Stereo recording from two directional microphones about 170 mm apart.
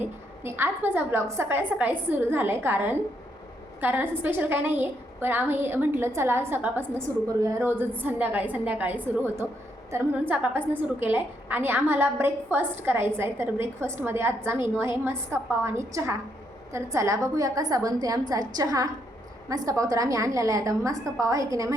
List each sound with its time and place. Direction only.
0.0 s a woman's voice: 15° right (ahead or behind)